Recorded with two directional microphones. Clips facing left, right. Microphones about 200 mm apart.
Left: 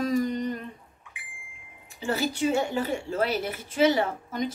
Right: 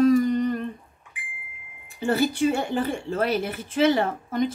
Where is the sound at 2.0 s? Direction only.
55° right (ahead or behind).